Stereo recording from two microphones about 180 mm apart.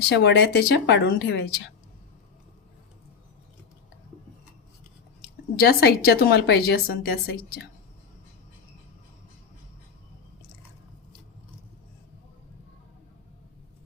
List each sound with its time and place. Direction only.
0.1 s speech: 70° left (ahead or behind)
5.5 s a woman's voice: 60° left (ahead or behind)